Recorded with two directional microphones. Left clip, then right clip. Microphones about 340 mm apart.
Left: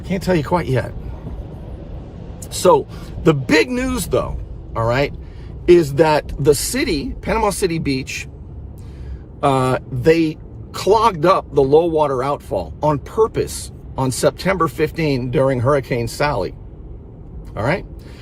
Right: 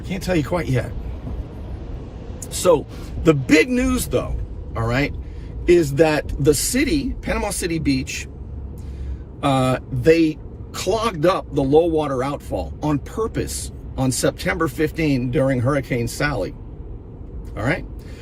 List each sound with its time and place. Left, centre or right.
0.1 s speech: centre
2.5 s speech: centre
9.4 s speech: centre